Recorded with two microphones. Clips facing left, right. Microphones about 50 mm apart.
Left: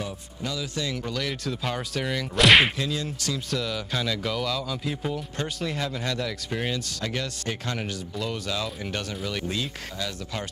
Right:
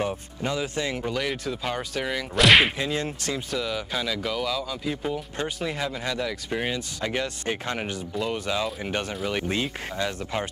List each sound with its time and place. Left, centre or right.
0.0 s speech: right; by 2.7 s centre
2.8 s speech: right
3.4 s speech: centre; by 10.4 s right